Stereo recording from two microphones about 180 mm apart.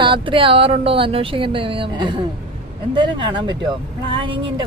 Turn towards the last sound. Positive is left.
turn(degrees=-30)  # may be behind; listen again after turning